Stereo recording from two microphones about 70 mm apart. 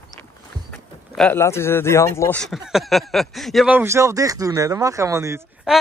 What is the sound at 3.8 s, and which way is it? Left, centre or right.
Speech, right.